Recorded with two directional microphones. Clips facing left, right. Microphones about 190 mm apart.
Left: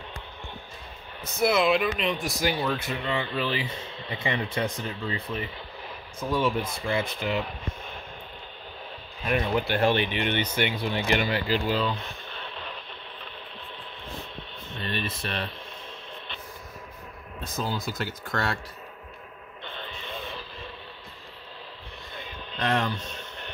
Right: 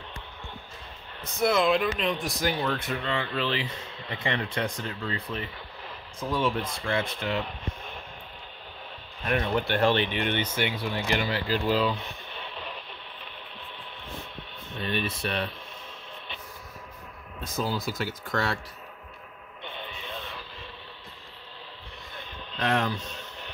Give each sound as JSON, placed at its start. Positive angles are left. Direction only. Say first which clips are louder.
{"t": 1.2, "sound": "speech", "louder": "left 1 dB", "side_deg": 5}
{"t": 9.2, "sound": "speech", "louder": "left 1 dB", "side_deg": 5}
{"t": 11.4, "sound": "speech", "louder": "right 1 dB", "side_deg": 5}
{"t": 14.8, "sound": "speech", "louder": "right 2 dB", "side_deg": -5}
{"t": 17.8, "sound": "speech", "louder": "right 1 dB", "side_deg": -5}
{"t": 22.5, "sound": "speech", "louder": "even", "side_deg": 0}